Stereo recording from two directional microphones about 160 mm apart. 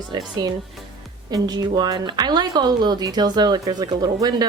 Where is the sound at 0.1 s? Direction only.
25° right (ahead or behind).